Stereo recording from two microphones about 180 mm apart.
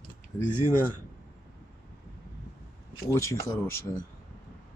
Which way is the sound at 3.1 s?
15° left (ahead or behind).